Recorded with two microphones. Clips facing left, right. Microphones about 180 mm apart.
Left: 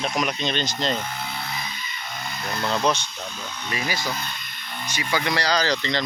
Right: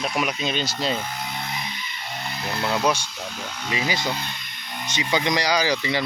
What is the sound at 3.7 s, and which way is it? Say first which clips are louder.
Speech: right 2 dB; 20° right (ahead or behind).